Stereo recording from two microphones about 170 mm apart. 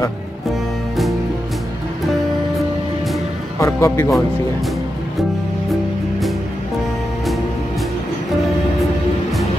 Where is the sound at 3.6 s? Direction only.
15° left (ahead or behind).